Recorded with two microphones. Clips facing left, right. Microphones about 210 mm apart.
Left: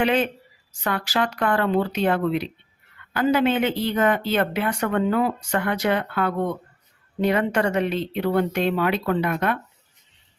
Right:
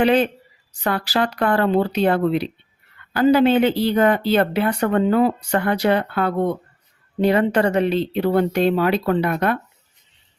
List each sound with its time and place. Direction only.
0.0 s speech: 35° right (ahead or behind)